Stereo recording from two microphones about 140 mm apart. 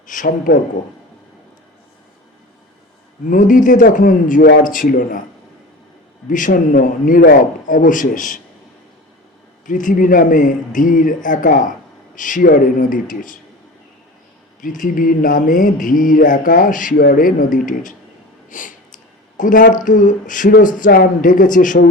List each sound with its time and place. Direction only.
0.1 s mantra: 70° left (ahead or behind)
3.2 s mantra: 70° left (ahead or behind)
6.2 s mantra: 70° left (ahead or behind)
9.6 s mantra: 70° left (ahead or behind)
14.6 s mantra: 75° left (ahead or behind)
18.4 s snort: 70° left (ahead or behind)
19.4 s mantra: 70° left (ahead or behind)